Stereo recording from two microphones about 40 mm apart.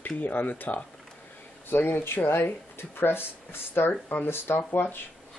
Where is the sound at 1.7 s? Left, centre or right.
Left.